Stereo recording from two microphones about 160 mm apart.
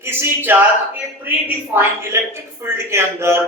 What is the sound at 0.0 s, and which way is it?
Speech, 15° right (ahead or behind).